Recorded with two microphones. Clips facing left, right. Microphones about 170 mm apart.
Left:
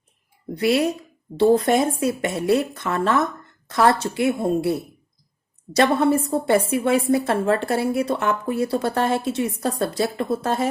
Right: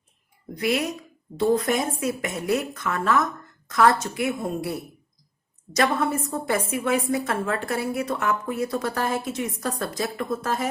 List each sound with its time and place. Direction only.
0.5 s a woman's voice: 30° left (ahead or behind)